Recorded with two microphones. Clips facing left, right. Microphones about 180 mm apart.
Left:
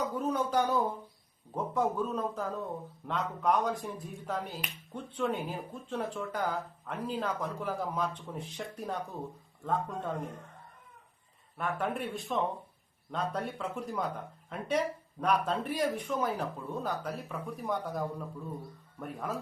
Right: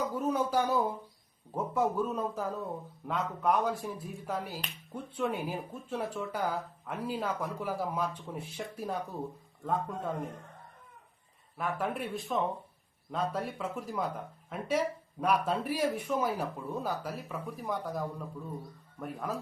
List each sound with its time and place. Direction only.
0.1 s a sound: 10° right (ahead or behind)
1.5 s speech: 10° right (ahead or behind)
11.5 s speech: centre (ahead or behind)